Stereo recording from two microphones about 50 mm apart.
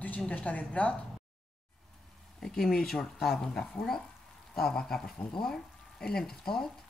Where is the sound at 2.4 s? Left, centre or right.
Centre.